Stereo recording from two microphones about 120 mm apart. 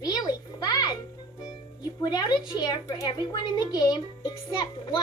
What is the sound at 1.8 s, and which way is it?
A child's voice, 35° left (ahead or behind).